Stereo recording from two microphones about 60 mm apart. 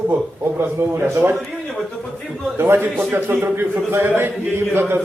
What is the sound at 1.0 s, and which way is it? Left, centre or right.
Speech, right.